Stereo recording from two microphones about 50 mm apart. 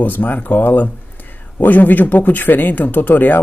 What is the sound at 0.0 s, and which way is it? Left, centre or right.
Speech, left.